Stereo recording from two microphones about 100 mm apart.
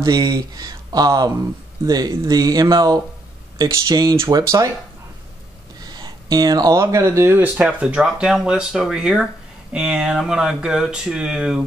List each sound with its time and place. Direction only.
0.0 s speech: 40° right (ahead or behind)
5.8 s speech: 40° right (ahead or behind); by 11.6 s 5° right (ahead or behind)